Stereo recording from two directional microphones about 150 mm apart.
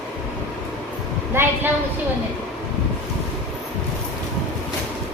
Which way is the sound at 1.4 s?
15° right (ahead or behind).